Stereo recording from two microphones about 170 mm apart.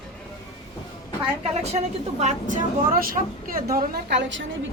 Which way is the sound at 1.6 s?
40° right (ahead or behind).